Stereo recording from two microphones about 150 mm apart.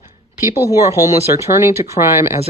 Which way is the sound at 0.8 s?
20° right (ahead or behind).